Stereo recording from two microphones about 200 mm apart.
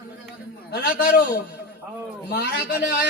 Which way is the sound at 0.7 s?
50° left (ahead or behind).